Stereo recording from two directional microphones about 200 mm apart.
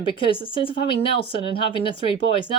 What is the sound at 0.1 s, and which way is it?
Speech, 25° left (ahead or behind).